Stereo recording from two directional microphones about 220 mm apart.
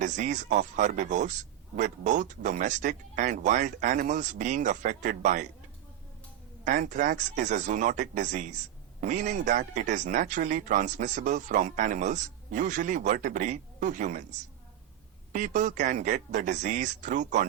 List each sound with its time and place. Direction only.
0.0 s speech: 35° right (ahead or behind)
6.7 s speech: 35° right (ahead or behind)